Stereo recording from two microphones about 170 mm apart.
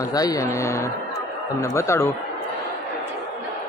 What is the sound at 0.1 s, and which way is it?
Speech, 20° left (ahead or behind).